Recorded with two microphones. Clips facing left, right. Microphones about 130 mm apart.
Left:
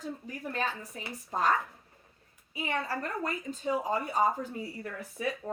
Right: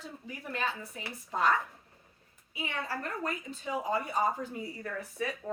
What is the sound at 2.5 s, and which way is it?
A woman's voice, 40° left (ahead or behind).